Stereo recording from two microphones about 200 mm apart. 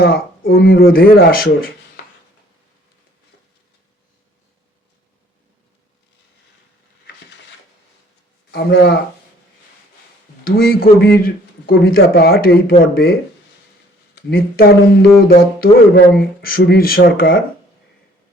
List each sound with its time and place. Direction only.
0.0 s speech: 50° left (ahead or behind)
8.4 s speech: 55° left (ahead or behind)
10.4 s speech: 50° left (ahead or behind)
14.3 s speech: 50° left (ahead or behind)